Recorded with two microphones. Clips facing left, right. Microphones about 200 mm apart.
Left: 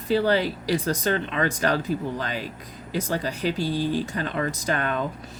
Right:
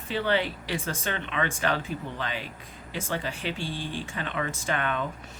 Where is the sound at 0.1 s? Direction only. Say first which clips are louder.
Left 6 dB; 40° left (ahead or behind).